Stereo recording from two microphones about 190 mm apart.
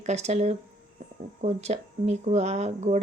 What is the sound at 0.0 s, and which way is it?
Speech, 35° right (ahead or behind).